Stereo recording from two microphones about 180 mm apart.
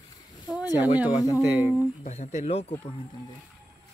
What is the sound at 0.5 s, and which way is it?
Speech, 10° right (ahead or behind).